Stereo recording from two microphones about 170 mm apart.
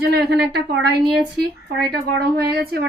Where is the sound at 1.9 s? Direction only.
65° right (ahead or behind).